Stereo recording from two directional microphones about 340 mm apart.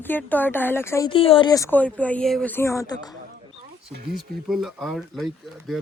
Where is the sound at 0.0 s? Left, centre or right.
Centre.